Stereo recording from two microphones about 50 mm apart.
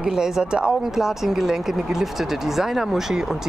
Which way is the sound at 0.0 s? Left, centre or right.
Centre.